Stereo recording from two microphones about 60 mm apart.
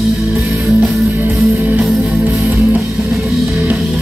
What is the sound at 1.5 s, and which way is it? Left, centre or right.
Music, right.